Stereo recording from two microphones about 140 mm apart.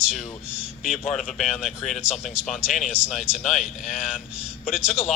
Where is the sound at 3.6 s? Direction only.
60° left (ahead or behind).